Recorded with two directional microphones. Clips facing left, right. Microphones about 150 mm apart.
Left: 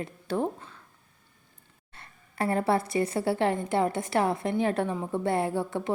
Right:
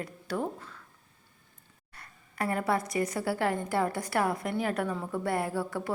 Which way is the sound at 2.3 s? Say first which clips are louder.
Left 4 dB; 30° left (ahead or behind).